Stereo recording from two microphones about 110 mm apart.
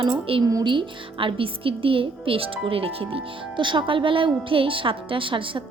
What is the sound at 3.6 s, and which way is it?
A woman's voice, 45° right (ahead or behind).